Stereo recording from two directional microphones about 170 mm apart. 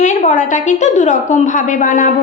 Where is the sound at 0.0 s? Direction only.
45° left (ahead or behind).